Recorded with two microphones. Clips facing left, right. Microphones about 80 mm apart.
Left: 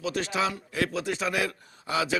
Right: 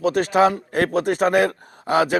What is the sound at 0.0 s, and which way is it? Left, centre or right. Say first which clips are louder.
Speech: right 11 dB; right.